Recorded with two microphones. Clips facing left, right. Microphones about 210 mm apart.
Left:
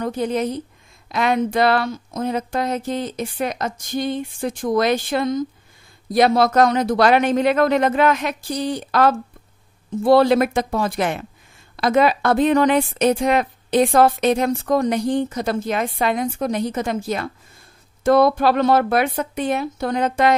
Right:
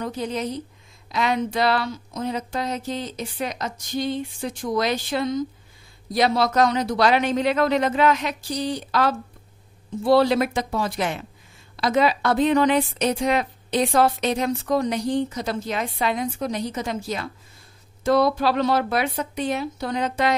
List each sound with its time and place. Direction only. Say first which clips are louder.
0.0 s a woman's voice: left 5 dB; 55° left (ahead or behind)